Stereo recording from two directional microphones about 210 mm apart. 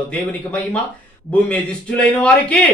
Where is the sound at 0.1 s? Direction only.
5° left (ahead or behind).